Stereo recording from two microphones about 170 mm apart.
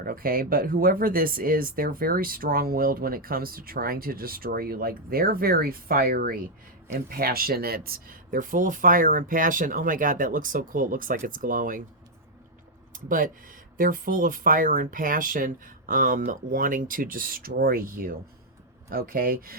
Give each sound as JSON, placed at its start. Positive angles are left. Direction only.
{"t": 0.0, "sound": "speech", "side_deg": -60}
{"t": 12.9, "sound": "speech", "side_deg": -55}
{"t": 18.9, "sound": "speech", "side_deg": -60}